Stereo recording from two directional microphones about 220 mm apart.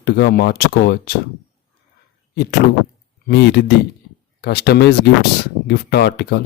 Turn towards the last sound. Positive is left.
turn(degrees=50)  # may be behind; listen again after turning